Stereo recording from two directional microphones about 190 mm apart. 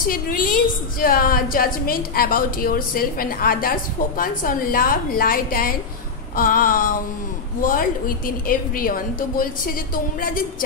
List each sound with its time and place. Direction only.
0.0 s a woman's voice: 50° left (ahead or behind)